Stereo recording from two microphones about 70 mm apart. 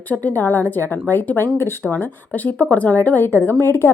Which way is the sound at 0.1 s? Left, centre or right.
Left.